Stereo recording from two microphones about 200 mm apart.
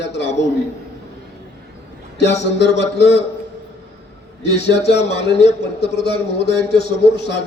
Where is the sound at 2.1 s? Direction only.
60° left (ahead or behind).